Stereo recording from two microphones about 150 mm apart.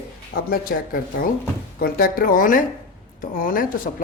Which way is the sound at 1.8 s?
80° left.